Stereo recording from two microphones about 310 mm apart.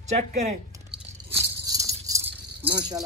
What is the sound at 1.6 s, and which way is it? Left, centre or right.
Keys jangling, centre.